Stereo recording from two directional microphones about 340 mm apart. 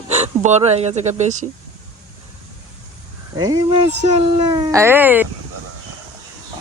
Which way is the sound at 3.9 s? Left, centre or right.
Right.